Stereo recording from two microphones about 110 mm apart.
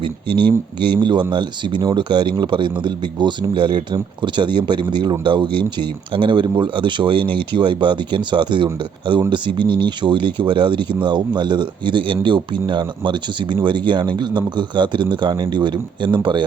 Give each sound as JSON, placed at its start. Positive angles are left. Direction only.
{"t": 0.0, "sound": "speech", "side_deg": -45}